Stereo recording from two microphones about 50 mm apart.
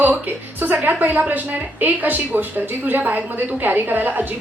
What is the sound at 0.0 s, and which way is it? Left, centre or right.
A woman's voice, right.